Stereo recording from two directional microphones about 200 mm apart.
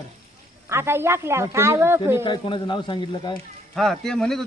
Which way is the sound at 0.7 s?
10° right (ahead or behind).